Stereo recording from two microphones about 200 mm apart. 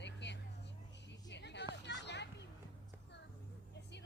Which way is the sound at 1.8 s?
60° left (ahead or behind).